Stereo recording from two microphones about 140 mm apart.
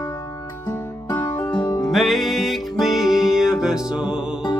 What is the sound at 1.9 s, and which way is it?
Music, centre (ahead or behind).